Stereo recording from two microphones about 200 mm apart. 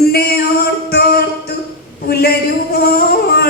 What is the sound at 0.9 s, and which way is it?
Music, 50° left (ahead or behind).